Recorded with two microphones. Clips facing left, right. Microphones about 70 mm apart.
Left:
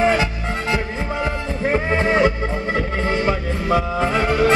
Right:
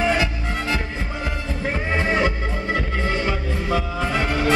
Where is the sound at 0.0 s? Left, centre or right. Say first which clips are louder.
Left 3 dB; left.